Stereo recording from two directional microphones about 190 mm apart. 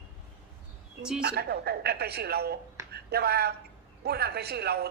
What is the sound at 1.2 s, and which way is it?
A man's voice, 55° right (ahead or behind).